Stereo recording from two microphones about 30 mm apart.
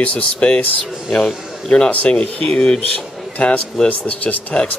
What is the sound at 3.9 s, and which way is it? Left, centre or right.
Speech, left.